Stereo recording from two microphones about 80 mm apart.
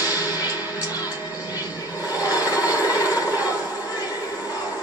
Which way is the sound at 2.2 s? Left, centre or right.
Left.